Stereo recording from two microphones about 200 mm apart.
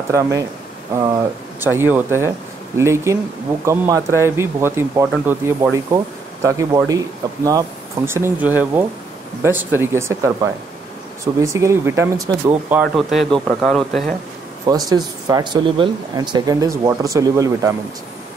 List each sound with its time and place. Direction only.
0.1 s speech: 15° right (ahead or behind)
1.6 s speech: 10° right (ahead or behind)
12.8 s speech: centre (ahead or behind)
14.7 s speech: 20° right (ahead or behind)